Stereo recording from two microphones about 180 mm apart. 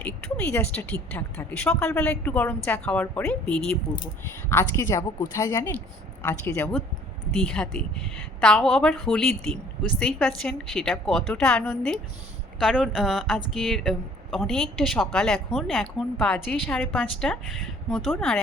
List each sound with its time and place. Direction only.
0.0 s speech: 10° left (ahead or behind)
4.4 s speech: 15° left (ahead or behind)
6.6 s speech: 5° left (ahead or behind)